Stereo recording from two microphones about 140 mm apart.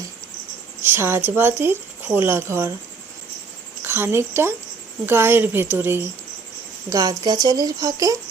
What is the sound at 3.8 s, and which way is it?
A woman's voice, 15° right (ahead or behind).